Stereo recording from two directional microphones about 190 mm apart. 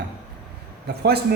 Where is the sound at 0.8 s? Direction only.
60° right (ahead or behind).